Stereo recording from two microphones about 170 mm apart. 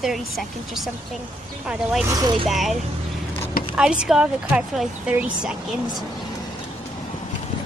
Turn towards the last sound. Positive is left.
turn(degrees=-5)  # may be behind; listen again after turning